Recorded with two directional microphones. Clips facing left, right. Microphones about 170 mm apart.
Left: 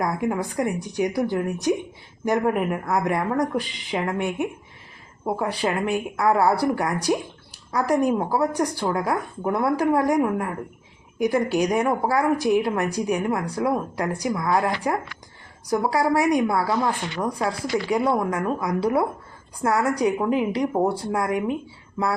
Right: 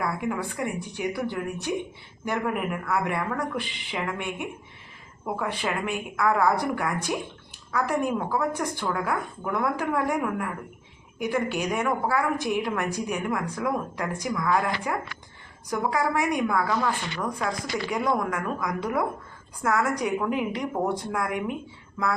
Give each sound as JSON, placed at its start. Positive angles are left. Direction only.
{"t": 0.0, "sound": "speech", "side_deg": 40}